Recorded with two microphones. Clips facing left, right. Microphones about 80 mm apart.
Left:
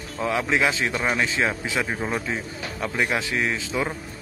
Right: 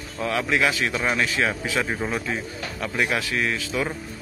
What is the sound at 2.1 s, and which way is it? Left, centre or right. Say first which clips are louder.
Speech: even; centre.